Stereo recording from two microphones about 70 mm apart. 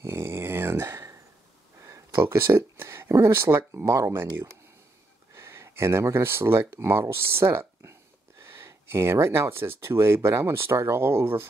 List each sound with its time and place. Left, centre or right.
0.0 s a sound: right
1.8 s speech: right
5.3 s speech: right